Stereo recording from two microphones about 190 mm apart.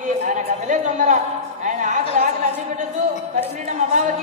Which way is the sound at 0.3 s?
40° right (ahead or behind).